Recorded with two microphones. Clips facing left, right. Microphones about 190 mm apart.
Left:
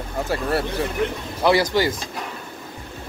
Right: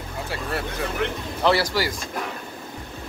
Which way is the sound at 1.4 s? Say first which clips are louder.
Left 3 dB; 20° left (ahead or behind).